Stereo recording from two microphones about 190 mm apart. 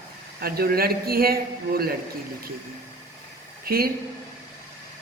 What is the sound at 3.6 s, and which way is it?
Speech, 50° right (ahead or behind).